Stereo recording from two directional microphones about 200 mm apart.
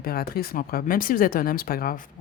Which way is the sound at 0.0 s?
50° left (ahead or behind).